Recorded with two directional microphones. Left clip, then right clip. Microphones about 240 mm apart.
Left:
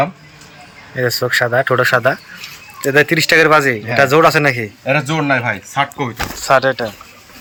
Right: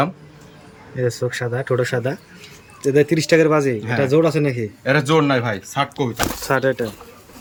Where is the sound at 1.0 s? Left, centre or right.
Left.